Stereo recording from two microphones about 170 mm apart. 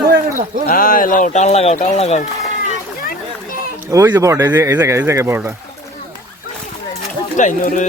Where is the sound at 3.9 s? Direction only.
15° right (ahead or behind).